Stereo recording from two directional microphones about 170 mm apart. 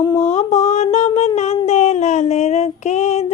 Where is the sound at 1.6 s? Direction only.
40° left (ahead or behind).